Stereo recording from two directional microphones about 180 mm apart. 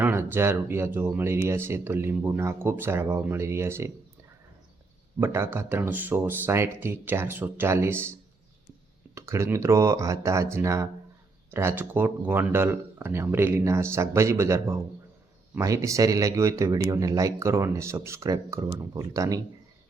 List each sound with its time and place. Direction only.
0.0 s speech: 10° right (ahead or behind)
5.2 s speech: 15° right (ahead or behind)
9.1 s speech: 15° right (ahead or behind)